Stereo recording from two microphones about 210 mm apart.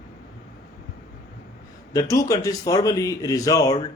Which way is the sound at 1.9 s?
15° left (ahead or behind).